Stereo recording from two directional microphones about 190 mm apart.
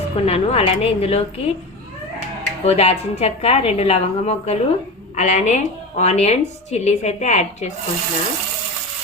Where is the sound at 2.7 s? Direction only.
35° left (ahead or behind).